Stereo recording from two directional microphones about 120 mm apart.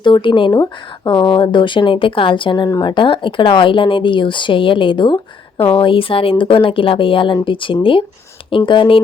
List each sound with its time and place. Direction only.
0.0 s speech: 40° left (ahead or behind)
0.5 s speech: 30° left (ahead or behind)